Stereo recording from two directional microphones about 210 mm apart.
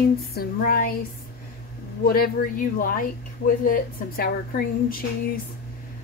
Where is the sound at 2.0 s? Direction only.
45° left (ahead or behind).